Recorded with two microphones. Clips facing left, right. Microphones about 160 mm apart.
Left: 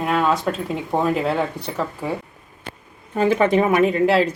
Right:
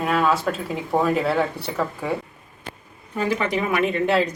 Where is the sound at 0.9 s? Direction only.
15° left (ahead or behind).